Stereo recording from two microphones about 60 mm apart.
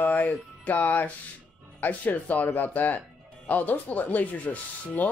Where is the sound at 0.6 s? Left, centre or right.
Left.